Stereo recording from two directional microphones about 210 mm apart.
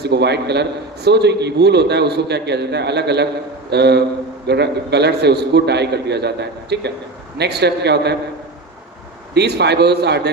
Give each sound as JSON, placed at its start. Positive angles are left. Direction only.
{"t": 0.0, "sound": "a man's voice", "side_deg": -50}
{"t": 9.3, "sound": "a man's voice", "side_deg": -50}